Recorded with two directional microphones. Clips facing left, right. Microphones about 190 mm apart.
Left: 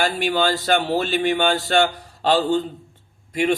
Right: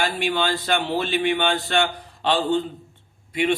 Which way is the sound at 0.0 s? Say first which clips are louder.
Left 3 dB; 40° left (ahead or behind).